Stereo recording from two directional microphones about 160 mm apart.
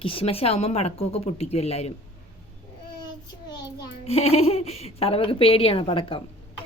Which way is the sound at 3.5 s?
25° left (ahead or behind).